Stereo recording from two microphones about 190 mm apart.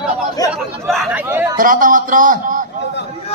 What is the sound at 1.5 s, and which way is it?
A man's voice, 45° right (ahead or behind).